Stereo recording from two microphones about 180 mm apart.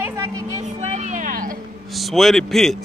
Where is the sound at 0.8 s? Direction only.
40° right (ahead or behind).